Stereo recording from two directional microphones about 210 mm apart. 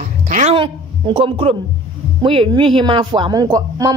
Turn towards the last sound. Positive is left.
turn(degrees=-15)  # may be behind; listen again after turning